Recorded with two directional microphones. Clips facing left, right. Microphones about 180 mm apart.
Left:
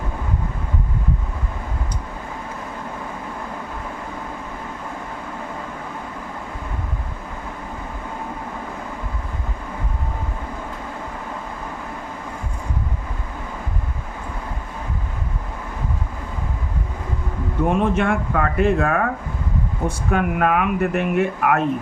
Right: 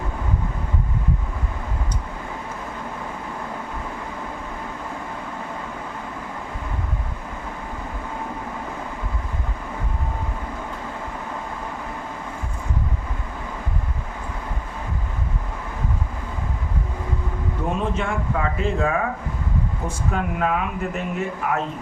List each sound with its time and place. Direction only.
17.7 s speech: 60° left (ahead or behind)